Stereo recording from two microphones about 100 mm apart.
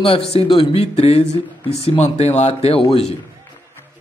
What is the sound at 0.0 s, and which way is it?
Speech, 70° left (ahead or behind).